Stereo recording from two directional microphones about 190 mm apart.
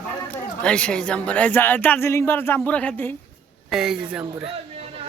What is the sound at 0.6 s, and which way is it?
Speech, 5° left (ahead or behind).